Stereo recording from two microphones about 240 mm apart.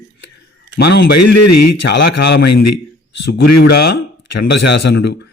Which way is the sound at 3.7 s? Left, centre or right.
Left.